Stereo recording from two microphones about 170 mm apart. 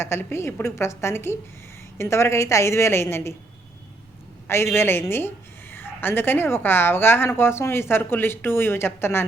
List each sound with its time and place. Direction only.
0.0 s a woman's voice: 15° left (ahead or behind)
4.4 s a woman's voice: 15° left (ahead or behind)